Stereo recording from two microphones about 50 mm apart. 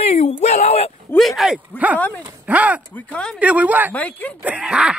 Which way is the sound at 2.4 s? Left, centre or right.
Right.